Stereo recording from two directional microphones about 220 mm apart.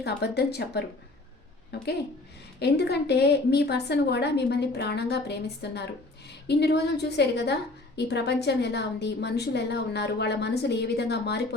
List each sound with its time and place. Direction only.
0.0 s a woman's voice: 50° left (ahead or behind)